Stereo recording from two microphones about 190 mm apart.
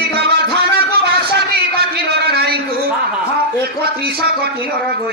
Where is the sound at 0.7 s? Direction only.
55° right (ahead or behind).